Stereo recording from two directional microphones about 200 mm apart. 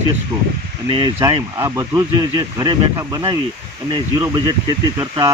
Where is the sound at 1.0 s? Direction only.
20° right (ahead or behind).